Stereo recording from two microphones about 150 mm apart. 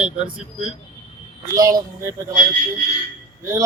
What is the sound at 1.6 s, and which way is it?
Speech, 25° right (ahead or behind).